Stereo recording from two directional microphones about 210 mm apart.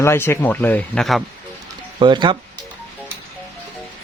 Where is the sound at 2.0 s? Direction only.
20° right (ahead or behind).